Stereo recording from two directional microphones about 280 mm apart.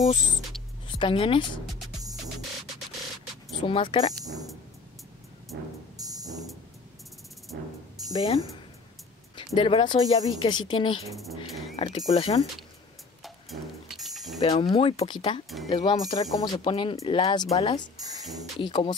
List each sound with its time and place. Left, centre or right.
0.8 s speech: centre
2.9 s music: centre
3.6 s speech: centre
4.2 s speech: centre
5.5 s music: right
5.9 s music: centre
7.5 s music: right
8.1 s speech: centre
9.6 s speech: centre
13.2 s a sound: centre
14.4 s speech: centre